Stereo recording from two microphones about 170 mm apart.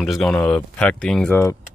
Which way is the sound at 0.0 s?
Centre (ahead or behind).